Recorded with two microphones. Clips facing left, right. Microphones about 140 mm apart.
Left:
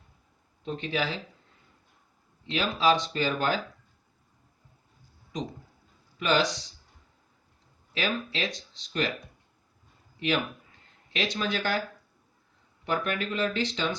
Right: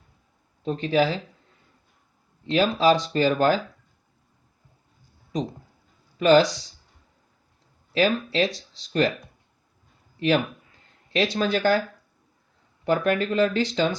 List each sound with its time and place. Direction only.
0.6 s speech: 40° right (ahead or behind)
2.5 s speech: 40° right (ahead or behind)
6.1 s speech: 40° right (ahead or behind)
7.9 s speech: 35° right (ahead or behind)
10.2 s speech: 40° right (ahead or behind)
12.8 s speech: 40° right (ahead or behind)